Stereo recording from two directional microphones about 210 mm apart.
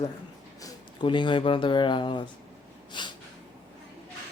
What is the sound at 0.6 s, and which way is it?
Speech, 20° left (ahead or behind).